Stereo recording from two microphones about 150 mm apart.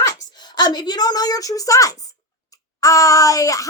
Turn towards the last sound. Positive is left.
turn(degrees=20)  # may be behind; listen again after turning